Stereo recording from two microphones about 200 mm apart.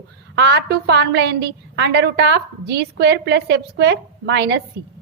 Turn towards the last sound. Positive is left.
turn(degrees=-60)  # may be behind; listen again after turning